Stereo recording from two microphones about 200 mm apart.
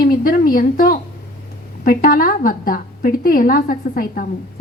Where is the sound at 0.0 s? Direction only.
45° left (ahead or behind).